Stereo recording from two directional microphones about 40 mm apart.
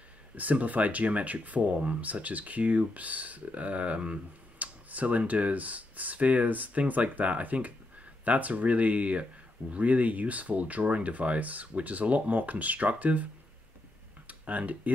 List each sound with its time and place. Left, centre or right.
0.4 s speech: right
14.2 s tick-tock: right